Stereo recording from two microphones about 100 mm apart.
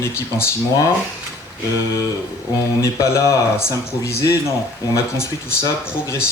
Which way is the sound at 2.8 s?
30° left (ahead or behind).